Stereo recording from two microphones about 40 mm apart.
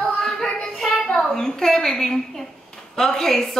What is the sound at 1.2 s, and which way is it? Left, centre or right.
A woman's voice, centre.